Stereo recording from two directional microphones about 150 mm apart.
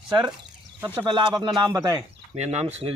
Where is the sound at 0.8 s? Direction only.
15° right (ahead or behind).